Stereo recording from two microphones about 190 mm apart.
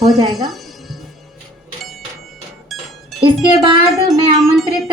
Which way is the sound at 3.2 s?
25° right (ahead or behind).